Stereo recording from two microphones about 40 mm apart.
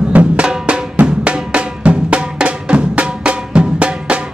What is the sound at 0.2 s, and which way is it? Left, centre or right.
Drum, right.